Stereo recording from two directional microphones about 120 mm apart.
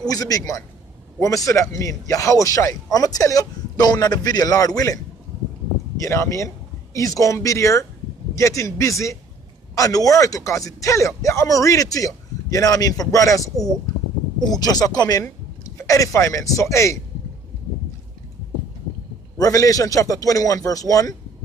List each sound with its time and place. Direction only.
0.1 s speech: 30° left (ahead or behind)
14.5 s speech: 30° left (ahead or behind)
19.3 s speech: 30° left (ahead or behind)